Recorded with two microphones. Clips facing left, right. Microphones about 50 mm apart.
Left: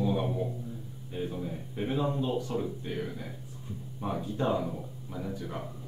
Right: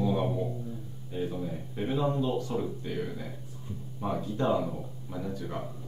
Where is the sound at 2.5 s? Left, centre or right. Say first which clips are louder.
Right 1 dB; centre.